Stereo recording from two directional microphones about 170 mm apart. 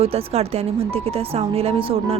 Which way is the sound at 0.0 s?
35° right (ahead or behind).